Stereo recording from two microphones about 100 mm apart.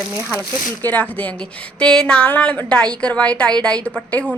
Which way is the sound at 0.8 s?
15° left (ahead or behind).